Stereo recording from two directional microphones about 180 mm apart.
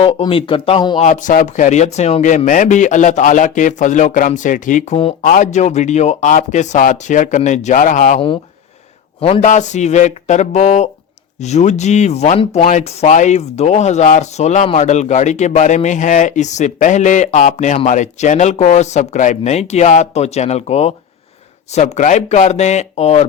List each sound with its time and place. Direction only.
0.0 s speech: 30° left (ahead or behind)
1.0 s speech: 45° left (ahead or behind)
9.2 s speech: 40° left (ahead or behind)